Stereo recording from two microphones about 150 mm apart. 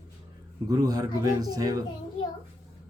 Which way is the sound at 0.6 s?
25° right (ahead or behind).